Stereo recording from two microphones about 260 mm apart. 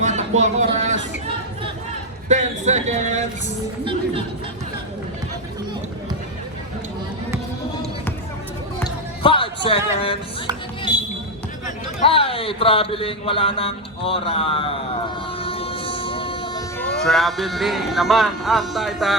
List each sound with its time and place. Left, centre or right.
0.0 s a sound: right
2.3 s speech: right
8.8 s music: centre
12.0 s speech: left
15.4 s a sound: left
16.7 s speech: centre